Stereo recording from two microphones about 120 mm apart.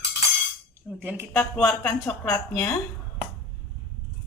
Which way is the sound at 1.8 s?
25° left (ahead or behind).